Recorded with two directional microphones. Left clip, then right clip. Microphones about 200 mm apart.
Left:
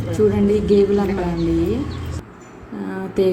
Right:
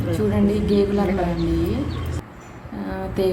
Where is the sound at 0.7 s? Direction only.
15° left (ahead or behind).